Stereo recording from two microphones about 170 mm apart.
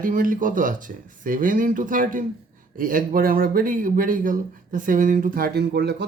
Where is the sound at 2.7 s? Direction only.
50° right (ahead or behind); by 6.0 s 75° right (ahead or behind).